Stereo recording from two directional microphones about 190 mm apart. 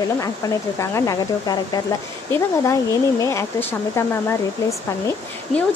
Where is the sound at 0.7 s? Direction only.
15° left (ahead or behind).